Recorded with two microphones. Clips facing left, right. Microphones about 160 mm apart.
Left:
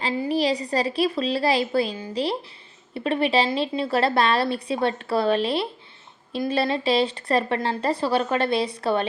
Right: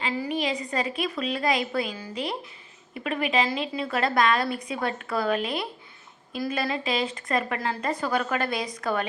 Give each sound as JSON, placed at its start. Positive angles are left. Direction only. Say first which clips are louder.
{"t": 0.0, "sound": "a woman's voice", "louder": "left 5 dB", "side_deg": 35}